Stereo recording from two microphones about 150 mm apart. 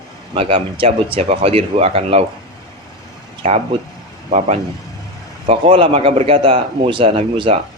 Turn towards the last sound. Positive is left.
turn(degrees=-40)  # may be behind; listen again after turning